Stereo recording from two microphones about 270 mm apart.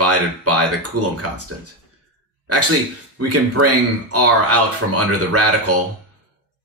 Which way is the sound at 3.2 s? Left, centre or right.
Right.